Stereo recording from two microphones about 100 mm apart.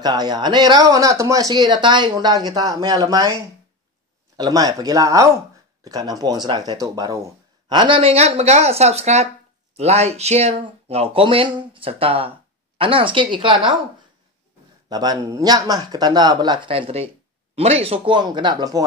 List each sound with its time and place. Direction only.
0.0 s speech: 45° right (ahead or behind)
4.4 s speech: 40° right (ahead or behind)
7.7 s speech: 55° right (ahead or behind)
8.0 s speech: 85° right; by 13.7 s 55° right (ahead or behind)
14.9 s speech: 40° right (ahead or behind)